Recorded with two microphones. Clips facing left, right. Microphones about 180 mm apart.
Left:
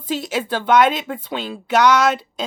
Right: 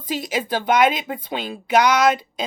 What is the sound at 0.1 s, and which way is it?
Speech, 15° right (ahead or behind).